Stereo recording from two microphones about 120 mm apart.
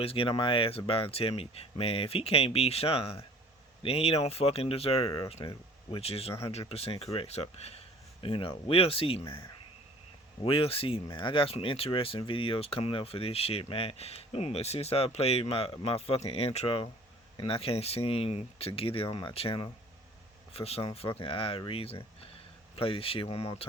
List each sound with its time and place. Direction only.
0.0 s speech: 50° left (ahead or behind)
8.2 s speech: 50° left (ahead or behind)
10.4 s speech: 50° left (ahead or behind)